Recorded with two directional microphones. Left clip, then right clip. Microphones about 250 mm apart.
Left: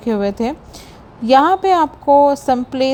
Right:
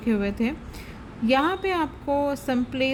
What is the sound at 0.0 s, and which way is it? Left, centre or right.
A woman's voice, centre.